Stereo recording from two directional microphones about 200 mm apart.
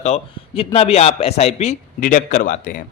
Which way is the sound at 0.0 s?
30° left (ahead or behind).